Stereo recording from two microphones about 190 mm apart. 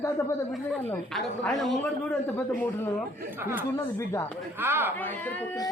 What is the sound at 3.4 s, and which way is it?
Speech, 10° right (ahead or behind).